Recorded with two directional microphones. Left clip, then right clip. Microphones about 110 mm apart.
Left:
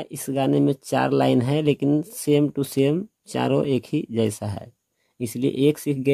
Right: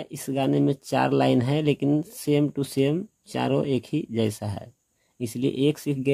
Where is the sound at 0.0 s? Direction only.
30° left (ahead or behind).